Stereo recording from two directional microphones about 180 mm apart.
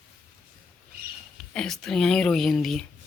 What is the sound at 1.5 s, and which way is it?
Speech, 5° left (ahead or behind).